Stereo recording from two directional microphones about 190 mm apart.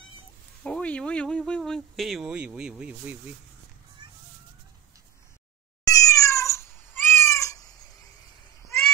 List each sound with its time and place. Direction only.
0.7 s speech: 5° left (ahead or behind)
5.9 s cat: 15° left (ahead or behind)